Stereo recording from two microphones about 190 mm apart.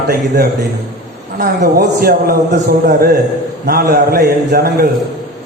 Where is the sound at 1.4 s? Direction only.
55° right (ahead or behind).